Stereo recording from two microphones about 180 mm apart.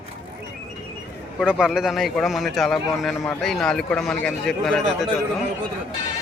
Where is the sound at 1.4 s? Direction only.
Centre (ahead or behind).